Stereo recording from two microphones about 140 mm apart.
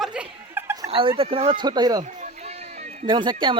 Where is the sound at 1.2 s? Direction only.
40° right (ahead or behind).